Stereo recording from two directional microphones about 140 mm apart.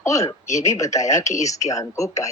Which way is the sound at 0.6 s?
20° left (ahead or behind).